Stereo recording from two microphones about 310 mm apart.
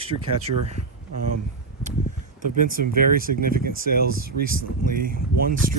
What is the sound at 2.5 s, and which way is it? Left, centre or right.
Speech, right.